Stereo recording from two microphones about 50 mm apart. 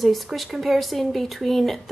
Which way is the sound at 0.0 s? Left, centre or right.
Centre.